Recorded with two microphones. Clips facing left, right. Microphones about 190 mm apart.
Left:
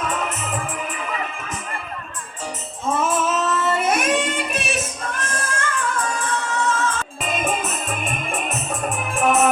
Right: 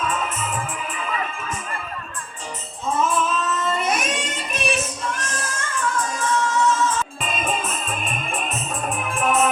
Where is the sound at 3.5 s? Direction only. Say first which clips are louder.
Left 3 dB; 75° left (ahead or behind); by 4.3 s 55° left (ahead or behind).